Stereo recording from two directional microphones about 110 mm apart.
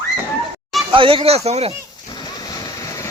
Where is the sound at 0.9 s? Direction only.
55° right (ahead or behind); by 1.7 s 75° right (ahead or behind).